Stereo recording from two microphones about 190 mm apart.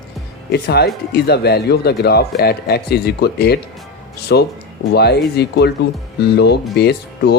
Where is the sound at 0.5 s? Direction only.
60° left (ahead or behind).